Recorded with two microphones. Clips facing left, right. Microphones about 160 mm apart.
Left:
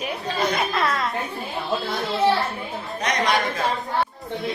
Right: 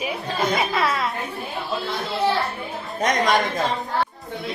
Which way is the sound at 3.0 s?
45° right (ahead or behind).